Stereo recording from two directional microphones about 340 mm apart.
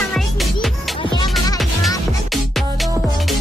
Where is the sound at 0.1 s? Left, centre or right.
Centre.